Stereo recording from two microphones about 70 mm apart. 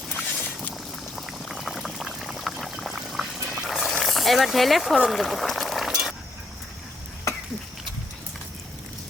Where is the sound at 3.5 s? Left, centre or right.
Centre.